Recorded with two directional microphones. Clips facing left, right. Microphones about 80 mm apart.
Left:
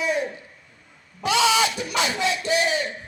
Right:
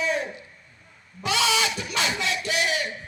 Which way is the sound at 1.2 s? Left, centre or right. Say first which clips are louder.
Left 4 dB; left.